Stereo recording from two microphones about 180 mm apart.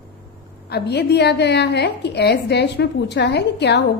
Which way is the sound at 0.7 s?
65° left (ahead or behind).